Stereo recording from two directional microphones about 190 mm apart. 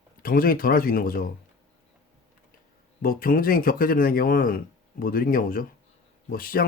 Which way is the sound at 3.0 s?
50° left (ahead or behind).